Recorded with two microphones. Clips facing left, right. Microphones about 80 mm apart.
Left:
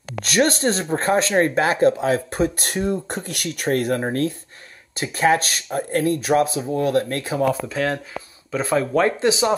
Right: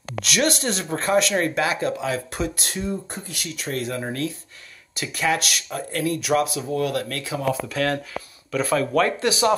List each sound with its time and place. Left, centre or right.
0.2 s speech: left
7.6 s speech: centre